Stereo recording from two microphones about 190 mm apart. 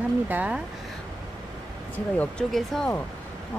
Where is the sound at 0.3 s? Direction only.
10° right (ahead or behind).